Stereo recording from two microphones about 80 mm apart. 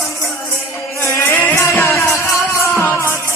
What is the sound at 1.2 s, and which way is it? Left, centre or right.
Music, left.